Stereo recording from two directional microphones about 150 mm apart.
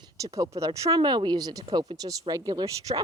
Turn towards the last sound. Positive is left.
turn(degrees=-25)  # may be behind; listen again after turning